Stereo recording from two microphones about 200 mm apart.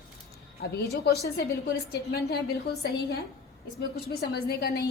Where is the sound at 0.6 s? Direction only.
55° left (ahead or behind).